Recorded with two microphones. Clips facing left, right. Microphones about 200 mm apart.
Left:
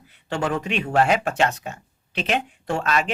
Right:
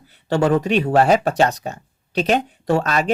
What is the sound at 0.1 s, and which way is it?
Speech, 40° right (ahead or behind).